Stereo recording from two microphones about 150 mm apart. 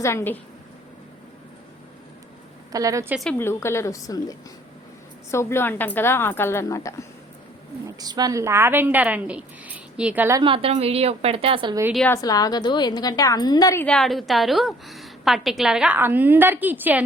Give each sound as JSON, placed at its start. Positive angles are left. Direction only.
{"t": 0.0, "sound": "a woman's voice", "side_deg": 20}
{"t": 2.7, "sound": "a woman's voice", "side_deg": -20}
{"t": 3.3, "sound": "a woman's voice", "side_deg": 15}
{"t": 7.9, "sound": "a woman's voice", "side_deg": -25}
{"t": 10.4, "sound": "a woman's voice", "side_deg": -35}
{"t": 12.0, "sound": "a woman's voice", "side_deg": 20}
{"t": 13.8, "sound": "a woman's voice", "side_deg": 5}